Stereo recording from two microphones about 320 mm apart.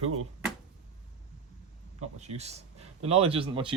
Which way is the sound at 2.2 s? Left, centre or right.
Centre.